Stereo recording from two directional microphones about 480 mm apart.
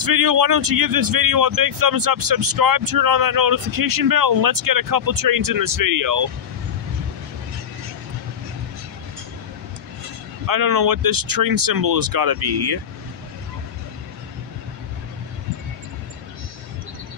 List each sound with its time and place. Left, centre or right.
0.0 s a man's voice: right
10.4 s a man's voice: right